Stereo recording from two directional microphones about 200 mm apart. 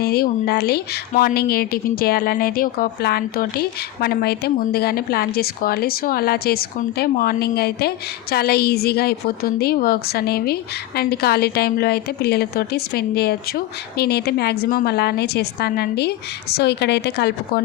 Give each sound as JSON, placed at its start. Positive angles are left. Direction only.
{"t": 0.0, "sound": "speech", "side_deg": 50}